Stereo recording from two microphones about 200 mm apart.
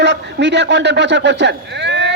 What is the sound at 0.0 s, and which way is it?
Speech, 60° right (ahead or behind).